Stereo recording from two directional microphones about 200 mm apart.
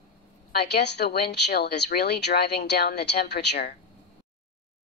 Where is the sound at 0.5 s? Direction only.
55° left (ahead or behind).